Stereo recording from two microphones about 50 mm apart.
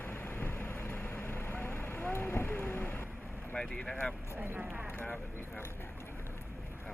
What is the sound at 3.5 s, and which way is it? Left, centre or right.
Speech, centre.